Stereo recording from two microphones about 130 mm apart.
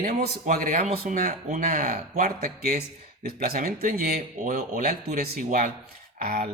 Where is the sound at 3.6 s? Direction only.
90° right.